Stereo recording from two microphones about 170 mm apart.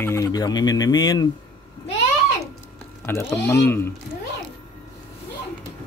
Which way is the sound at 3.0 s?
15° left (ahead or behind).